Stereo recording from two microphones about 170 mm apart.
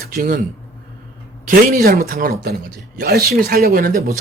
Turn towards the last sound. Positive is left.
turn(degrees=-60)  # may be behind; listen again after turning